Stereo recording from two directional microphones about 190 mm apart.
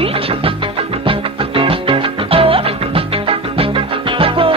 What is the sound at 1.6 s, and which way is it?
Music, 30° right (ahead or behind).